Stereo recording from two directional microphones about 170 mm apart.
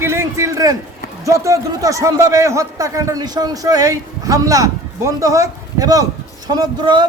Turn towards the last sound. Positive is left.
turn(degrees=-25)  # may be behind; listen again after turning